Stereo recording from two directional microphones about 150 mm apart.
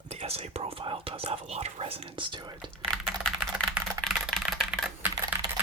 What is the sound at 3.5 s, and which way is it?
Typing, 5° right (ahead or behind).